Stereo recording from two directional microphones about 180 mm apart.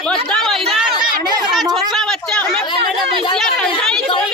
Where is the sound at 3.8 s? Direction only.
Centre (ahead or behind).